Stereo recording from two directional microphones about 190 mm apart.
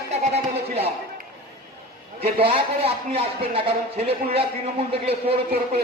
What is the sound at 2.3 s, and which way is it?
A man's voice, 30° right (ahead or behind).